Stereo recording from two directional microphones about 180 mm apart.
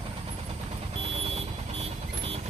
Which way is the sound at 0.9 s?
30° right (ahead or behind).